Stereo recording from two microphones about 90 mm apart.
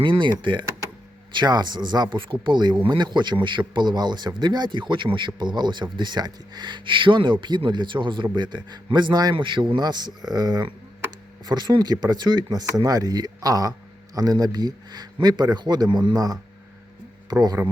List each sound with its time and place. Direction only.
0.0 s a man's voice: 65° right (ahead or behind)
9.3 s speech: 65° right (ahead or behind); by 16.4 s 45° right (ahead or behind)
17.6 s speech: 30° right (ahead or behind)